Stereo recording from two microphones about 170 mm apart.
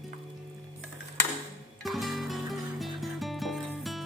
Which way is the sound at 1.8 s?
Centre (ahead or behind).